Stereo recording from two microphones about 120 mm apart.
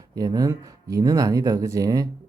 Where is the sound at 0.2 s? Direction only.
30° right (ahead or behind).